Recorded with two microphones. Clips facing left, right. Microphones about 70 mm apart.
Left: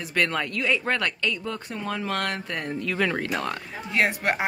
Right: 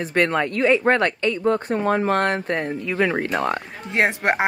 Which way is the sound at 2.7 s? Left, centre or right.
Centre.